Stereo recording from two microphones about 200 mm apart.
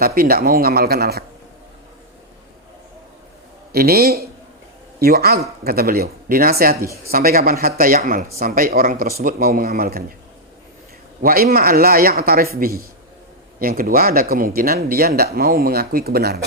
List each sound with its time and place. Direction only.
0.0 s speech: 50° right (ahead or behind)
3.7 s a man's voice: 50° right (ahead or behind)
11.2 s speech: 45° right (ahead or behind)